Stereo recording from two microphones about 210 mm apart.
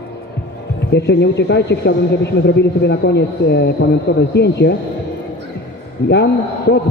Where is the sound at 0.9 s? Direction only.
55° left (ahead or behind).